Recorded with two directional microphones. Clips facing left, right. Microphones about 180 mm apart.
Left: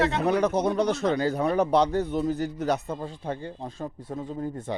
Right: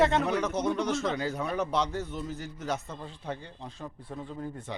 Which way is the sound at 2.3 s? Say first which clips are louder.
Left 10 dB; 40° left (ahead or behind).